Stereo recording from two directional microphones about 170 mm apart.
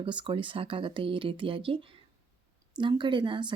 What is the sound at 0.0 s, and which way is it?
Speech, 30° right (ahead or behind).